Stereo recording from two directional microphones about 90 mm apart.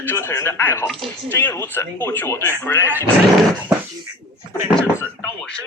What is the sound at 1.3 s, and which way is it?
Speech, 20° left (ahead or behind).